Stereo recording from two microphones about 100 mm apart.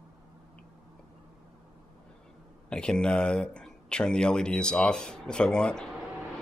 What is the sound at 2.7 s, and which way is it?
Speech, 10° left (ahead or behind).